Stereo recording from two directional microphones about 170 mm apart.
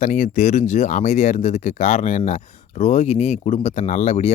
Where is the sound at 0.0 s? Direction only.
45° left (ahead or behind).